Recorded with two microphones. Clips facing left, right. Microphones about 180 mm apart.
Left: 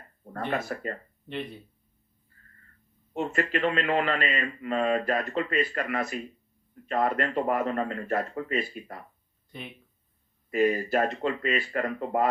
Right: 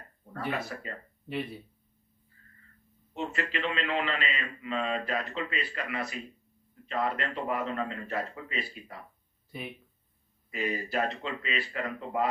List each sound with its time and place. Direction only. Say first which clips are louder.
0.5 s a man's voice: left 5 dB; 50° left (ahead or behind)
1.3 s speech: even; 5° right (ahead or behind)
3.1 s a man's voice: left 6 dB; 50° left (ahead or behind)
9.5 s speech: right 2 dB; 5° right (ahead or behind)
10.5 s a man's voice: left 8 dB; 45° left (ahead or behind)